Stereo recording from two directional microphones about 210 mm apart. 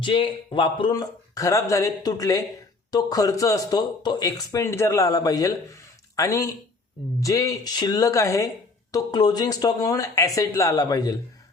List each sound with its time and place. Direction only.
0.0 s speech: 25° left (ahead or behind)